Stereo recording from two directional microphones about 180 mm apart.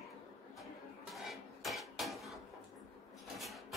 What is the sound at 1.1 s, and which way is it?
Dishes, centre (ahead or behind).